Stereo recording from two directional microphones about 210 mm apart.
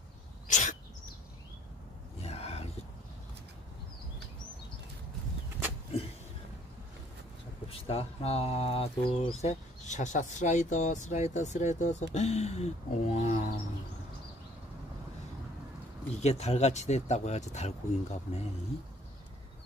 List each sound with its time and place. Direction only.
0.5 s bird: 35° left (ahead or behind)
2.2 s a sound: 30° left (ahead or behind)
7.6 s speech: 25° left (ahead or behind)
16.2 s speech: 30° left (ahead or behind)